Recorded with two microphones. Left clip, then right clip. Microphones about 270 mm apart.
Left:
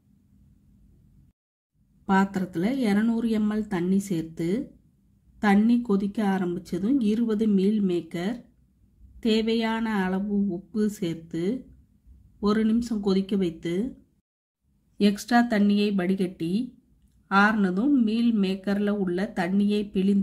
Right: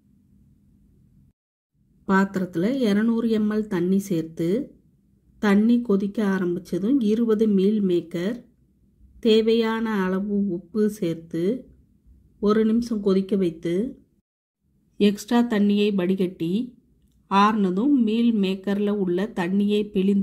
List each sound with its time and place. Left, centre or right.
2.0 s speech: centre
15.0 s speech: centre